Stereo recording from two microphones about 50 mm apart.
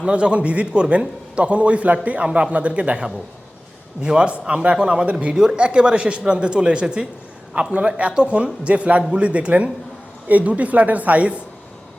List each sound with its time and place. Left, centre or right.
0.0 s a man's voice: right